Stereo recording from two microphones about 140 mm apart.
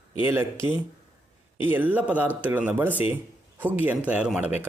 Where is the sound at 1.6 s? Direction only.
10° right (ahead or behind).